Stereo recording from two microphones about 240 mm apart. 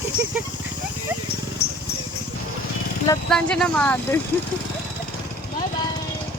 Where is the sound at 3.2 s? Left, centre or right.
Centre.